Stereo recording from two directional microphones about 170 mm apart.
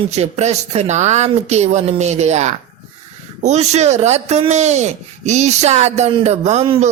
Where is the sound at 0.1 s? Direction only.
40° right (ahead or behind).